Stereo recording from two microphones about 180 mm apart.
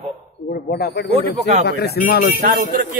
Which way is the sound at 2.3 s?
55° right (ahead or behind).